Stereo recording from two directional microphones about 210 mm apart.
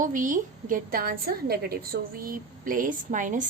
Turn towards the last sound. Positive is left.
turn(degrees=-40)  # may be behind; listen again after turning